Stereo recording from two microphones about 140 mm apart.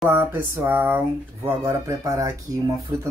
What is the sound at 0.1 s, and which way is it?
Speech, 15° right (ahead or behind).